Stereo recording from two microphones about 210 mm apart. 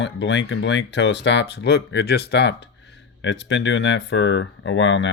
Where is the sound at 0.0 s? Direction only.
55° left (ahead or behind).